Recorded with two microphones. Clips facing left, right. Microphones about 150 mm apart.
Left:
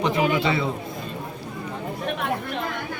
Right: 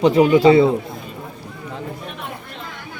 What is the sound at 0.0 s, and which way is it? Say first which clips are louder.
Speech: right 10 dB; 35° right (ahead or behind).